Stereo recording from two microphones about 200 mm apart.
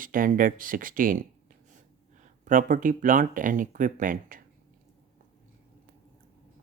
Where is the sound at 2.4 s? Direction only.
40° right (ahead or behind).